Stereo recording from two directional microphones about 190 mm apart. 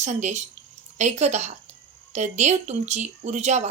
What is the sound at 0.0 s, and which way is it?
A woman's voice, 40° right (ahead or behind).